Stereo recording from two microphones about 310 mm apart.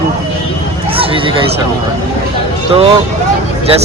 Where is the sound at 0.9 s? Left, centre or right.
Centre.